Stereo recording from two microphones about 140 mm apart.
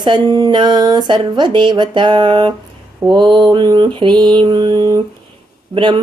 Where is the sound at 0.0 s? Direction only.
35° right (ahead or behind).